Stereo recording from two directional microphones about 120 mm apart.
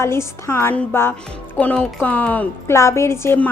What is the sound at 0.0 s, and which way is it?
A woman's voice, 20° left (ahead or behind).